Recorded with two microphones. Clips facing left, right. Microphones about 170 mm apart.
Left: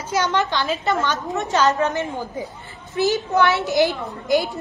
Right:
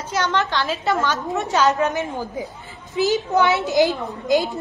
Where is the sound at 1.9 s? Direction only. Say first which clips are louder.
Even; 20° right (ahead or behind).